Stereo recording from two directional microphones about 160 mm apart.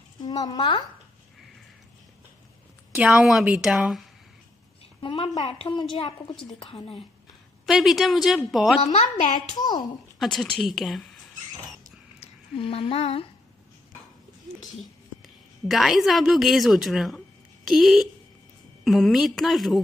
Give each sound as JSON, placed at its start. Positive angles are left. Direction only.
{"t": 0.2, "sound": "speech", "side_deg": 25}
{"t": 3.0, "sound": "a woman's voice", "side_deg": -5}
{"t": 5.0, "sound": "a woman's voice", "side_deg": 35}
{"t": 7.6, "sound": "a woman's voice", "side_deg": 0}
{"t": 8.8, "sound": "a woman's voice", "side_deg": 45}
{"t": 9.6, "sound": "speech", "side_deg": 25}
{"t": 10.1, "sound": "a woman's voice", "side_deg": 5}
{"t": 12.5, "sound": "a woman's voice", "side_deg": 35}
{"t": 15.2, "sound": "a woman's voice", "side_deg": 0}